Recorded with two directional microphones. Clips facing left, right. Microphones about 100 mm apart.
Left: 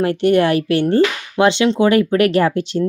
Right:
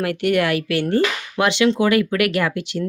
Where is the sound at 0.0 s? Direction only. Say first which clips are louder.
Left 5 dB; 30° left (ahead or behind).